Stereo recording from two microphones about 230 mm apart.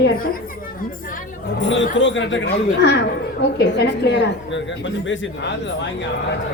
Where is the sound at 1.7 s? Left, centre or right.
Left.